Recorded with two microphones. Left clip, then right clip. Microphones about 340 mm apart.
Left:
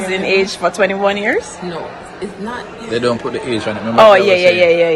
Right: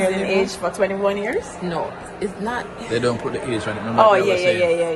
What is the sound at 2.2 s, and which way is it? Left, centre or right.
Speech, right.